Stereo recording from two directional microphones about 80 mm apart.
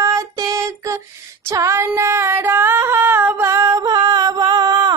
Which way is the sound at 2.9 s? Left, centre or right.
Right.